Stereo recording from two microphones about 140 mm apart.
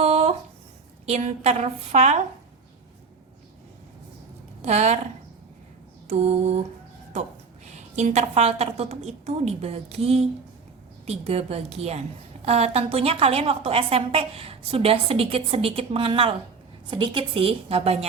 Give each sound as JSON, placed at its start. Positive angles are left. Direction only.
{"t": 0.0, "sound": "a sound", "side_deg": -50}
{"t": 1.0, "sound": "a woman's voice", "side_deg": -50}
{"t": 4.6, "sound": "a woman's voice", "side_deg": -50}
{"t": 6.1, "sound": "a woman's voice", "side_deg": -50}
{"t": 7.9, "sound": "a woman's voice", "side_deg": -55}